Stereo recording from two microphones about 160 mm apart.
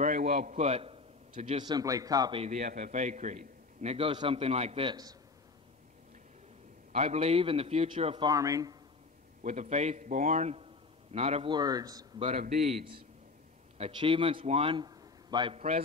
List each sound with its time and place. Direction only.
0.0 s a man's voice: 55° right (ahead or behind); by 2.4 s 25° right (ahead or behind)
2.4 s a man's voice: 45° right (ahead or behind); by 5.1 s 30° right (ahead or behind)
6.9 s a man's voice: 40° right (ahead or behind)
8.3 s speech: 20° right (ahead or behind)
9.4 s a man's voice: 50° right (ahead or behind)
11.5 s speech: 25° right (ahead or behind)
12.2 s a man's voice: 40° right (ahead or behind)
15.5 s a man's voice: 40° right (ahead or behind)